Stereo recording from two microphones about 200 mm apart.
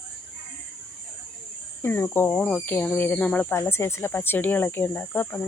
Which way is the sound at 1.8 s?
10° left (ahead or behind).